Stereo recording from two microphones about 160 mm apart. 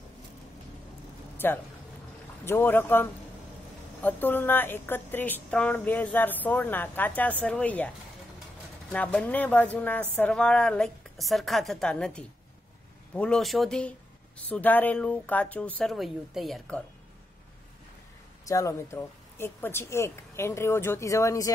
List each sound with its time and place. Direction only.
1.4 s a woman's voice: 15° left (ahead or behind)
8.9 s a woman's voice: 10° left (ahead or behind)
18.4 s a woman's voice: 20° left (ahead or behind)